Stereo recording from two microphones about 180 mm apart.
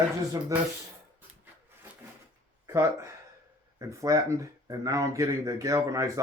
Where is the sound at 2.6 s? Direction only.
15° right (ahead or behind).